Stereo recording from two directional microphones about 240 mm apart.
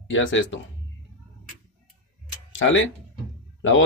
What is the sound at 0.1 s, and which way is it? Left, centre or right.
Speech, left.